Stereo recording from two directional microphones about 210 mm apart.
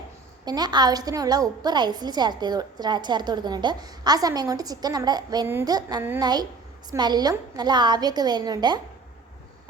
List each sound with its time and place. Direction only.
0.4 s a woman's voice: 20° right (ahead or behind)